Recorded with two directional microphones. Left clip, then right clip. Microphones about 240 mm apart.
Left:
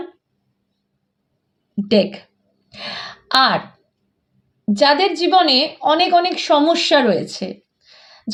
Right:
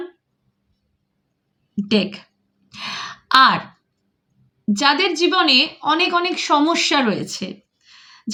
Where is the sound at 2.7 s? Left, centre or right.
Centre.